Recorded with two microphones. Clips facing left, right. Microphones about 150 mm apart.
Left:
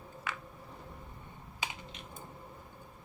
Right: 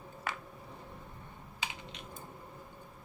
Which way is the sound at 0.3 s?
35° right (ahead or behind).